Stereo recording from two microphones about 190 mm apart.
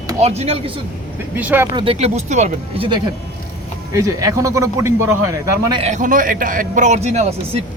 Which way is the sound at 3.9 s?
15° right (ahead or behind).